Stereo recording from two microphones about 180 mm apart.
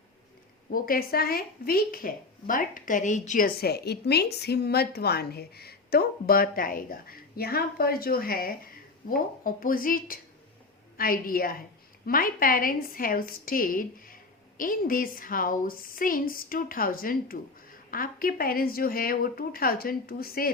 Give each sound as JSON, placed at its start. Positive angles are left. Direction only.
{"t": 0.7, "sound": "a woman's voice", "side_deg": 55}